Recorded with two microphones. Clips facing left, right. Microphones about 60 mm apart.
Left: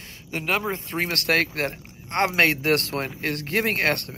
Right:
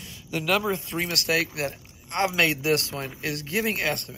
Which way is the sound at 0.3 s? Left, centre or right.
Left.